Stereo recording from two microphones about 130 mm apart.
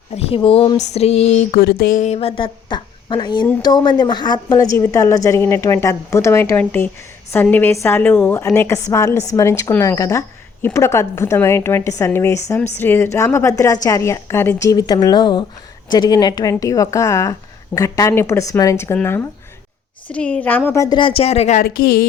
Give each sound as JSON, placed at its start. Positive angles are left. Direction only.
{"t": 0.1, "sound": "speech", "side_deg": 50}
{"t": 0.8, "sound": "female singing", "side_deg": 55}
{"t": 1.5, "sound": "a woman's voice", "side_deg": 80}
{"t": 20.1, "sound": "a woman's voice", "side_deg": 10}
{"t": 20.7, "sound": "a woman's voice", "side_deg": 25}
{"t": 20.9, "sound": "speech", "side_deg": 45}